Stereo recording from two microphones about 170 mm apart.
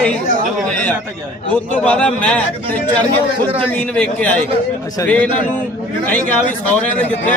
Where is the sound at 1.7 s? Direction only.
10° left (ahead or behind).